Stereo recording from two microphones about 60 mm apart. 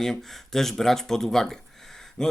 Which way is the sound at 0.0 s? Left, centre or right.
Centre.